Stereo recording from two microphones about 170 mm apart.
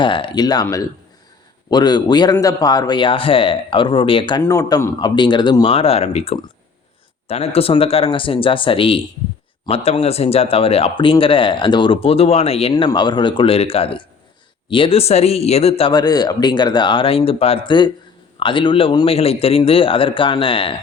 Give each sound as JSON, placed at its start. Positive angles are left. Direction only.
{"t": 0.0, "sound": "speech", "side_deg": 30}
{"t": 12.7, "sound": "speech", "side_deg": 25}
{"t": 15.9, "sound": "speech", "side_deg": 25}